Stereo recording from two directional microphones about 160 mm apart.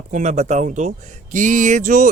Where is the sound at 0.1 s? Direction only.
45° right (ahead or behind).